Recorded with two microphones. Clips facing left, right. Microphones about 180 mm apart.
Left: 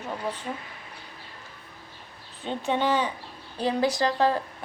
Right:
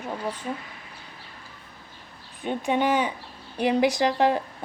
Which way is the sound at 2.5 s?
15° right (ahead or behind).